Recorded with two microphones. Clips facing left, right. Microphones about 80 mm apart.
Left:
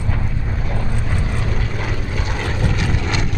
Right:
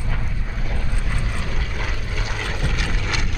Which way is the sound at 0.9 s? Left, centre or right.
Centre.